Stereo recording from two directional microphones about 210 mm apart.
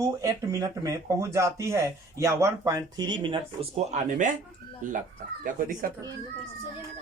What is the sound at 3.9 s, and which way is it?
Speech, 35° right (ahead or behind).